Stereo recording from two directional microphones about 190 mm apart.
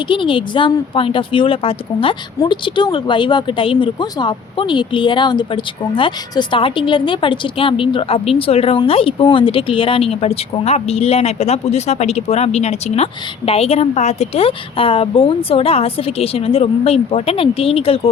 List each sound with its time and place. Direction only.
0.1 s a woman's voice: 25° left (ahead or behind)